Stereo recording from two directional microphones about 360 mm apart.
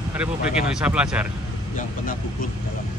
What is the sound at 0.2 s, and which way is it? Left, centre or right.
Speech, centre.